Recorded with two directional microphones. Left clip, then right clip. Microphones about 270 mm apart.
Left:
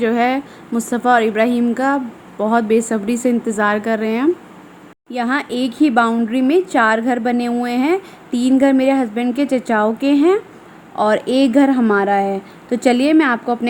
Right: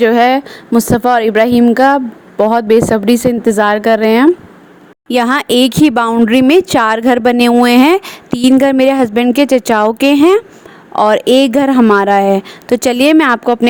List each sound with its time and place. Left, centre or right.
0.0 s speech: right